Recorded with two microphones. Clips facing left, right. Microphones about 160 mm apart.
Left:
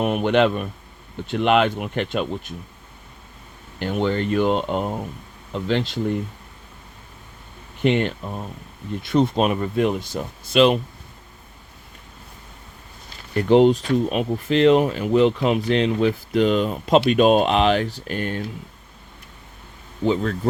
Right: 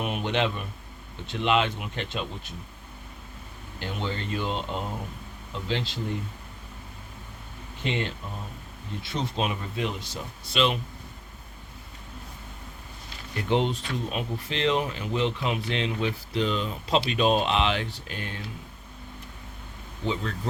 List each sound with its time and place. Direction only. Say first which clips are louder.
0.0 s speech: left 9 dB; 55° left (ahead or behind)
3.8 s speech: left 10 dB; 55° left (ahead or behind)
7.9 s speech: left 10 dB; 60° left (ahead or behind)
13.3 s speech: left 11 dB; 45° left (ahead or behind)
20.1 s speech: left 9 dB; 50° left (ahead or behind)